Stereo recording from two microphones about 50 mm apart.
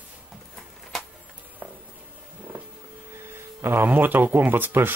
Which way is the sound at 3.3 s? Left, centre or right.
Right.